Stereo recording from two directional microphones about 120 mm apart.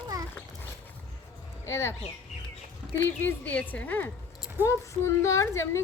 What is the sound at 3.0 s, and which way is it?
A woman's voice, 15° left (ahead or behind).